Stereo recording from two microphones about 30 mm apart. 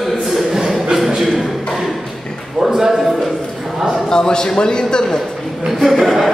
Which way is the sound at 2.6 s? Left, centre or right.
Centre.